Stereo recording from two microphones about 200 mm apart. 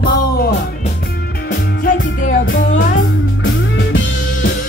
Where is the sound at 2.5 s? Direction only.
60° left (ahead or behind).